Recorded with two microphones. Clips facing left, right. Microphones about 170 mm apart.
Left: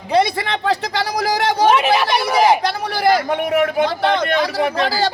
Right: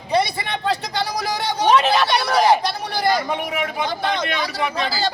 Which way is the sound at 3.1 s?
55° left (ahead or behind).